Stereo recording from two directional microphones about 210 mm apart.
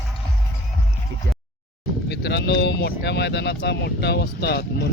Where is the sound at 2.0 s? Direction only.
50° left (ahead or behind).